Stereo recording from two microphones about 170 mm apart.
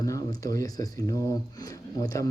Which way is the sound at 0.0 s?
20° left (ahead or behind).